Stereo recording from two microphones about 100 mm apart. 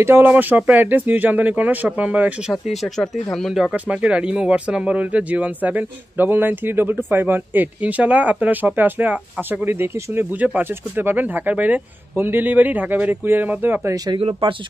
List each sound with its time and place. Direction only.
0.0 s speech: 20° right (ahead or behind)
2.7 s speech: centre (ahead or behind)
3.7 s speech: 15° right (ahead or behind)
14.4 s speech: 75° right (ahead or behind)